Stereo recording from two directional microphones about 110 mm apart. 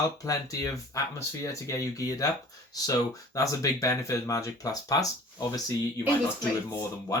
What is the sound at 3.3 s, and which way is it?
Speech, 30° left (ahead or behind).